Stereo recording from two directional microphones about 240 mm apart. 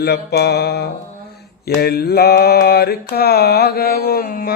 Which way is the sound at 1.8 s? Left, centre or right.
Left.